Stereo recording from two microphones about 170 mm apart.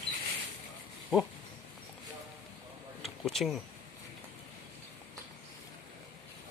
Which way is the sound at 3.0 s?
Centre (ahead or behind).